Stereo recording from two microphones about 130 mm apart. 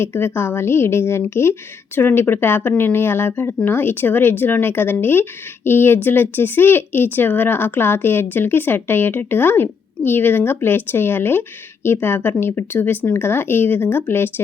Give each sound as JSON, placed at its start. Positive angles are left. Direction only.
{"t": 0.0, "sound": "a woman's voice", "side_deg": 20}